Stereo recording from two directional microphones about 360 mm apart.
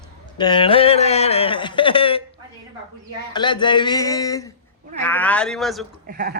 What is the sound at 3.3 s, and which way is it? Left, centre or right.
Speech, centre.